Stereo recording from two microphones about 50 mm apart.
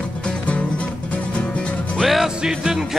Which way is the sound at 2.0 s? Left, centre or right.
Centre.